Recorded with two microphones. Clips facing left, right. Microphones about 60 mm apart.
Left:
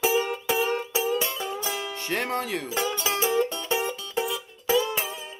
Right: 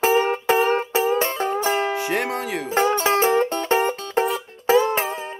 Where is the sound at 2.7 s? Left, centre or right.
Right.